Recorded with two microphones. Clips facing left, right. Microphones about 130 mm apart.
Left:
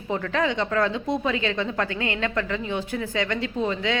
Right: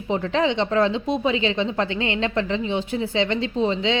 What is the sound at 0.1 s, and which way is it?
A woman's voice, 25° right (ahead or behind).